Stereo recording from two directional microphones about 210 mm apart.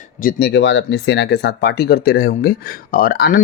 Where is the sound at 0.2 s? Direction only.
50° left (ahead or behind).